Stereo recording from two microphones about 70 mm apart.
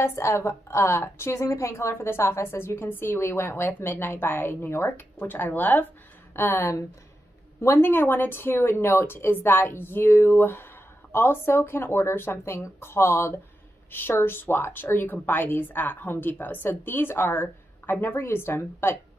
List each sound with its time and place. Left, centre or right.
0.0 s a woman's voice: left